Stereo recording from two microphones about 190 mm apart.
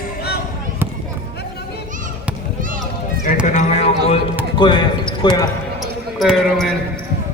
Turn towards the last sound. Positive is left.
turn(degrees=0)  # may be behind; listen again after turning